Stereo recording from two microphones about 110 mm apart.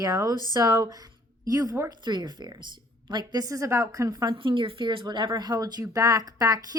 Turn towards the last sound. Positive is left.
turn(degrees=-35)  # may be behind; listen again after turning